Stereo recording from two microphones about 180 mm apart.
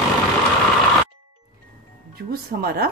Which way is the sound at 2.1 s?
60° right (ahead or behind).